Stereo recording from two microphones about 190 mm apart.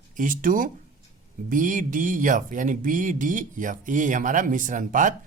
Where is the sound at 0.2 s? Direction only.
45° right (ahead or behind).